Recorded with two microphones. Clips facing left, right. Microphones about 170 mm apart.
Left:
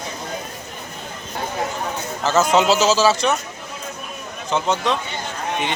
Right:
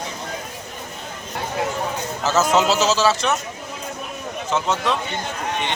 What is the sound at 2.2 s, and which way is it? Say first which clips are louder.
Speech: left 2 dB; centre (ahead or behind).